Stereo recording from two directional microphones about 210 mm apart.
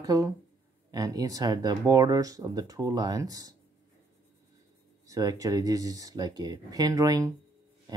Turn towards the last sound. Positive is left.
turn(degrees=-15)  # may be behind; listen again after turning